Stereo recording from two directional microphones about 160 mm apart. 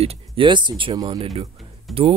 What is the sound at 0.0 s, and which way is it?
Speech, 35° right (ahead or behind).